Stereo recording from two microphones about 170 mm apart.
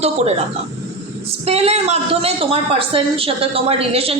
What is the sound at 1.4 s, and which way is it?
A woman's voice, 35° right (ahead or behind).